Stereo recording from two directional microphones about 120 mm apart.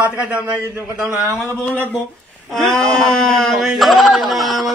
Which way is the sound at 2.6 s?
5° left (ahead or behind).